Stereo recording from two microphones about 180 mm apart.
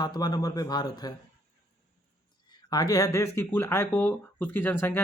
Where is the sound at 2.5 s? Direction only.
20° left (ahead or behind).